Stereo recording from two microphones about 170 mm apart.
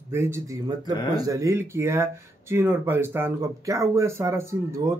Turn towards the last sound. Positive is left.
turn(degrees=-15)  # may be behind; listen again after turning